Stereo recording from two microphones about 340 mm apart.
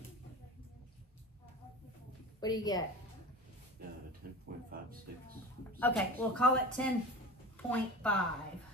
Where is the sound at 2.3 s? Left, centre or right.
Centre.